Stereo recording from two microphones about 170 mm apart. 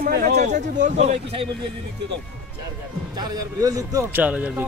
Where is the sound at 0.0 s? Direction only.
60° right (ahead or behind).